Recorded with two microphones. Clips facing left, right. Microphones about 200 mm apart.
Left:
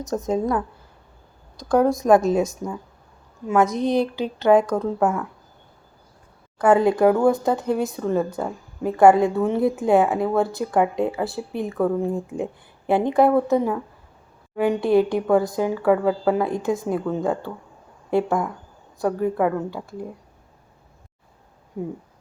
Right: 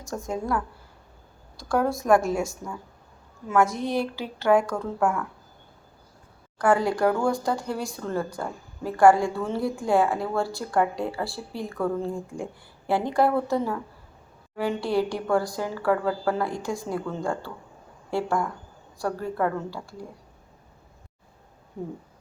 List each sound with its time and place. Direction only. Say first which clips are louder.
0.0 s speech: left 8 dB; 20° left (ahead or behind)
6.6 s speech: left 5 dB; 20° left (ahead or behind)